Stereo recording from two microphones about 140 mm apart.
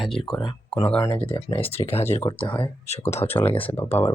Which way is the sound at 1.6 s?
45° left (ahead or behind).